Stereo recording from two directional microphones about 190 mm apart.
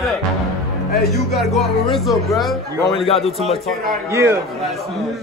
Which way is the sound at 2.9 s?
30° left (ahead or behind).